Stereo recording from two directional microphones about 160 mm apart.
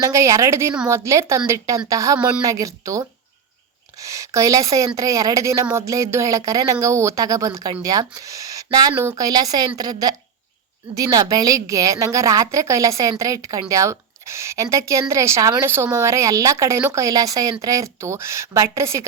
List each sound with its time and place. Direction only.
0.0 s a woman's voice: 20° right (ahead or behind)